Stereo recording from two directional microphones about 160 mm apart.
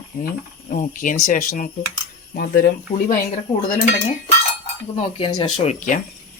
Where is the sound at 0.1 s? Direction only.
60° left (ahead or behind).